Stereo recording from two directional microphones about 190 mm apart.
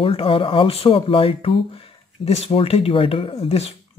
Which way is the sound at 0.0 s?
30° left (ahead or behind).